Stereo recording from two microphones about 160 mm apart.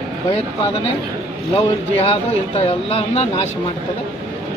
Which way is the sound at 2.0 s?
40° left (ahead or behind).